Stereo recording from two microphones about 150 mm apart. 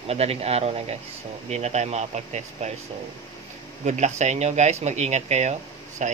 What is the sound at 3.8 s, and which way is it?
Speech, 50° right (ahead or behind).